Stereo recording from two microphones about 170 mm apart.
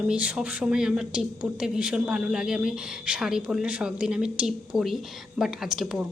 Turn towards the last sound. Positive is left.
turn(degrees=-5)  # may be behind; listen again after turning